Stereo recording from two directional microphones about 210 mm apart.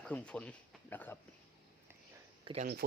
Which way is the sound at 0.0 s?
5° left (ahead or behind).